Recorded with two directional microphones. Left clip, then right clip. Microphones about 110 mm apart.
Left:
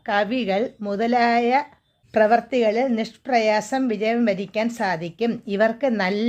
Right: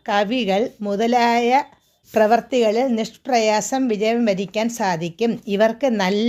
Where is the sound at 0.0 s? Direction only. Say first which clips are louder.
Right 2 dB; 30° right (ahead or behind).